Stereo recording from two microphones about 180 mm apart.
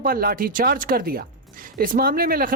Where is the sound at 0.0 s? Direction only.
55° right (ahead or behind).